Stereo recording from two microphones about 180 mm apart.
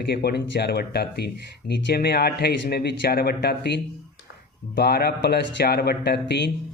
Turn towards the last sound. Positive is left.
turn(degrees=65)  # may be behind; listen again after turning